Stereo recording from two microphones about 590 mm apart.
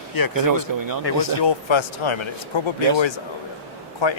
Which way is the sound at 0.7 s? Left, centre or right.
Right.